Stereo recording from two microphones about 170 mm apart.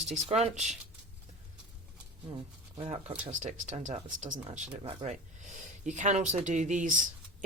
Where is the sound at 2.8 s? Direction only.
40° right (ahead or behind).